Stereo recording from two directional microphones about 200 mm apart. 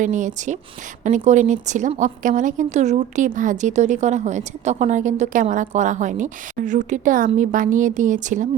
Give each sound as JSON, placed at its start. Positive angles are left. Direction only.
{"t": 0.0, "sound": "a woman's voice", "side_deg": -40}